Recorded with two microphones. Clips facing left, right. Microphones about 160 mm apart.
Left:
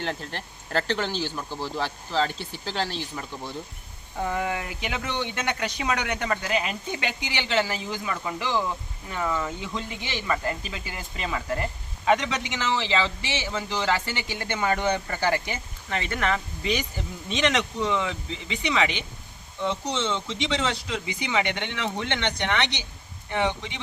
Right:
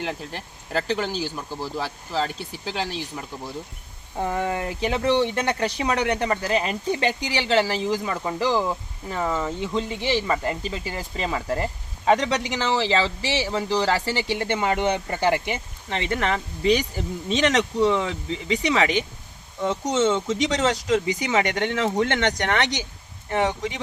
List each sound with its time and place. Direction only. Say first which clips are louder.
0.0 s speech: right 1 dB; 10° right (ahead or behind)
4.2 s speech: right 3 dB; 30° right (ahead or behind)